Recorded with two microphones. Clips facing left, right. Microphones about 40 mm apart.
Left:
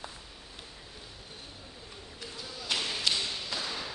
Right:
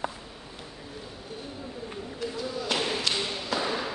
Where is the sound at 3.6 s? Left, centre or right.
Right.